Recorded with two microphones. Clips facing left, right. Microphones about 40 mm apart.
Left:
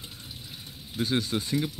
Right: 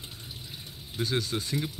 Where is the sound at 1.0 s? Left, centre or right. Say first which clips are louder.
Left 2 dB; left.